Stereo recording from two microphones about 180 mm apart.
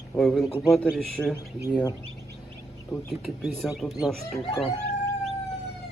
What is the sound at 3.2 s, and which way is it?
Speech, centre (ahead or behind).